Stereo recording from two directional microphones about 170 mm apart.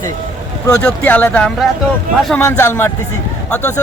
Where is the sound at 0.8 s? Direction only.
10° left (ahead or behind).